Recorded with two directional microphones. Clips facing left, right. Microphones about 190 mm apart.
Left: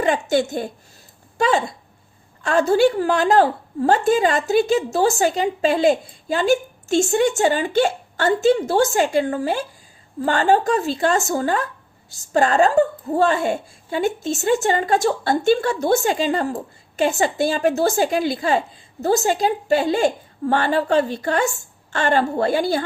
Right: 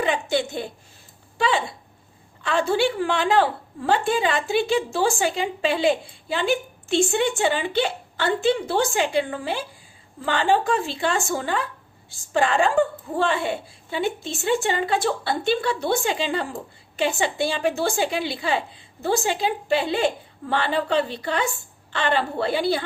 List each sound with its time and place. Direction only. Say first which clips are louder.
0.0 s a woman's voice: left 4 dB; 45° left (ahead or behind)